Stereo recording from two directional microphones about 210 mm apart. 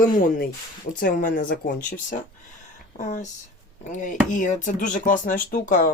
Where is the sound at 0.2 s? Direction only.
40° left (ahead or behind).